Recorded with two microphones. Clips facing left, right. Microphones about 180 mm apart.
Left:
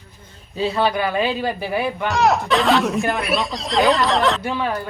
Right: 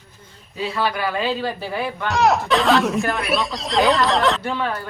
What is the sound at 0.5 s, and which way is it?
Speech, 25° left (ahead or behind).